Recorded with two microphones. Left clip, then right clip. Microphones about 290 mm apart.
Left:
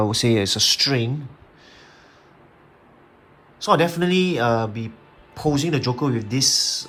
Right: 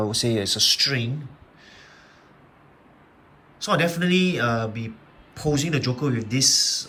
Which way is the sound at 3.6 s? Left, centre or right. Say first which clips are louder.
Left 4 dB; centre.